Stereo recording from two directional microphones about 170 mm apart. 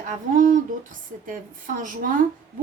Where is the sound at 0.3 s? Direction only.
50° right (ahead or behind).